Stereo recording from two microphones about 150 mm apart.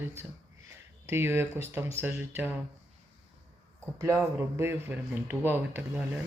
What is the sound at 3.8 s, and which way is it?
Speech, 15° right (ahead or behind).